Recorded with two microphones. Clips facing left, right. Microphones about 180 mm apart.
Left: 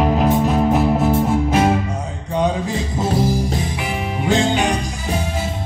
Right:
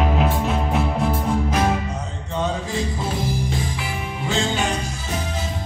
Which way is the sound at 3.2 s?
40° left (ahead or behind).